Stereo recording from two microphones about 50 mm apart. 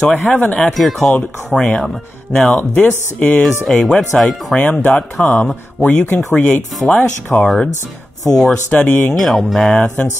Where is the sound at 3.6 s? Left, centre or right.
Centre.